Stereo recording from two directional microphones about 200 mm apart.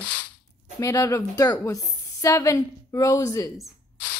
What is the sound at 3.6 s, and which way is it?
Spray, 10° left (ahead or behind).